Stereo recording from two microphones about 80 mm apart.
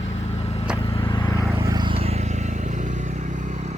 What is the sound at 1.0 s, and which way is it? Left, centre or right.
Vehicle, left.